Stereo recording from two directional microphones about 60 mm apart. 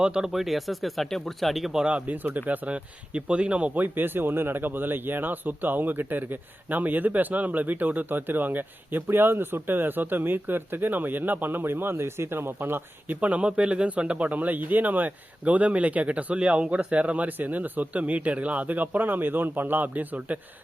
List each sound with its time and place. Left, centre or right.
0.0 s speech: centre
0.3 s speech: centre
1.8 s speech: right
3.9 s speech: right
13.1 s speech: right